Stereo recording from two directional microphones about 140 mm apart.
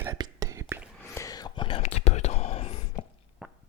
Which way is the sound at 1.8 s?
50° left (ahead or behind).